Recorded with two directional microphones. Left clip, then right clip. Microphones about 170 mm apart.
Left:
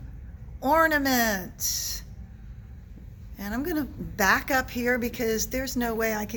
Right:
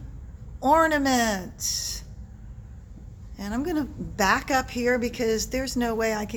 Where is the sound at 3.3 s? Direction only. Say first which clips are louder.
Right 2 dB; 15° right (ahead or behind).